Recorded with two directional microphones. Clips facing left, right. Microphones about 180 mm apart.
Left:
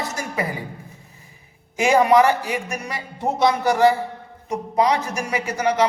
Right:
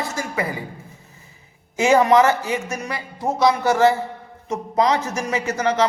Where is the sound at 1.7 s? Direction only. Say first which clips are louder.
Right 1 dB; 15° left (ahead or behind).